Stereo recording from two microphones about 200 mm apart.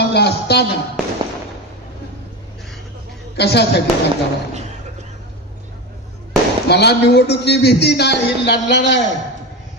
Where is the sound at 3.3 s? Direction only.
55° left (ahead or behind).